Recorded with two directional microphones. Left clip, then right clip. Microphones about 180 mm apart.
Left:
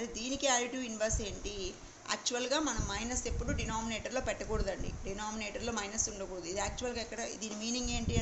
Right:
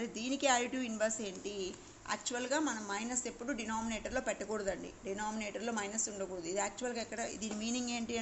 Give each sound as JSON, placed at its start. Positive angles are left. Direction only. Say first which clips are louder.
{"t": 0.0, "sound": "a woman's voice", "louder": "even", "side_deg": -20}